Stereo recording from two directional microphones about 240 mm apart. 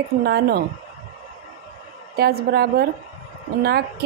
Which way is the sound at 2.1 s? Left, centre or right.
Right.